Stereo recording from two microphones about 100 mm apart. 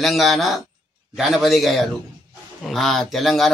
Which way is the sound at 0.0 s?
Centre (ahead or behind).